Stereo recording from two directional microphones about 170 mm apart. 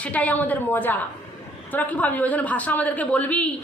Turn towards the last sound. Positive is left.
turn(degrees=10)  # may be behind; listen again after turning